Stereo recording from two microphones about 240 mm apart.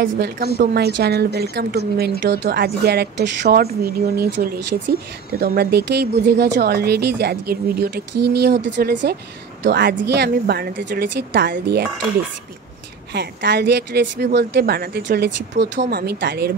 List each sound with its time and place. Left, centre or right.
0.0 s speech: right
13.1 s speech: right